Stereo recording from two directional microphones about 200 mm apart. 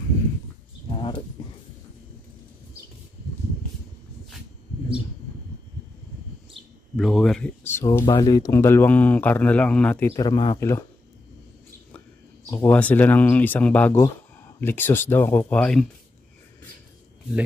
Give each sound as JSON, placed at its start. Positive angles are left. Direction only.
{"t": 0.8, "sound": "a sound", "side_deg": 25}
{"t": 7.0, "sound": "a man's voice", "side_deg": 0}
{"t": 12.4, "sound": "a man's voice", "side_deg": 10}